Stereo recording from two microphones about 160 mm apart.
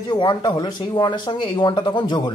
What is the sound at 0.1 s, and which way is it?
A man's voice, 25° left (ahead or behind).